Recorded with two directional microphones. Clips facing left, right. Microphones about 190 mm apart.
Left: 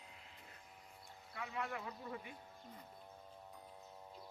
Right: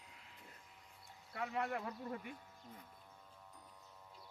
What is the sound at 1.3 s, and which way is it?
Speech, 45° right (ahead or behind).